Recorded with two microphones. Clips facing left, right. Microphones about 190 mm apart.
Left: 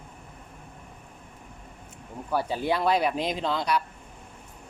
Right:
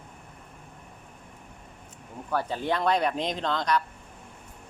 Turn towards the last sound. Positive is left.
turn(degrees=10)  # may be behind; listen again after turning